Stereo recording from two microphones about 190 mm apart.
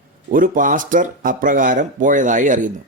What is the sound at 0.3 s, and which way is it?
Speech, 45° right (ahead or behind).